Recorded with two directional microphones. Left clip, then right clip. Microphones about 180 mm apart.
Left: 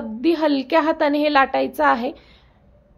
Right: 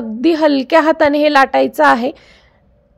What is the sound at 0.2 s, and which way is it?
Speech, 45° right (ahead or behind).